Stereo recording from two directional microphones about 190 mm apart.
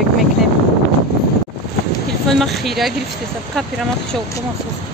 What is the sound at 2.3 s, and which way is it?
Speech, centre (ahead or behind).